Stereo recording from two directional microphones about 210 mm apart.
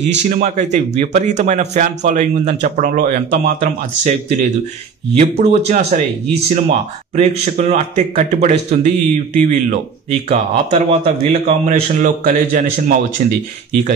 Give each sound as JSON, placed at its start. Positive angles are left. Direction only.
{"t": 0.2, "sound": "a man's voice", "side_deg": -35}